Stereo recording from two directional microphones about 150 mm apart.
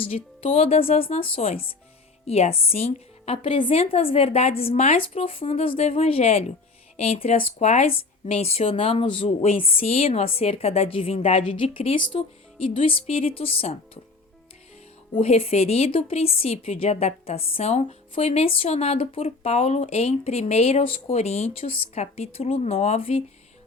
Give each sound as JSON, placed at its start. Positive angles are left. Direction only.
{"t": 0.0, "sound": "a woman's voice", "side_deg": 40}
{"t": 15.1, "sound": "a woman's voice", "side_deg": 40}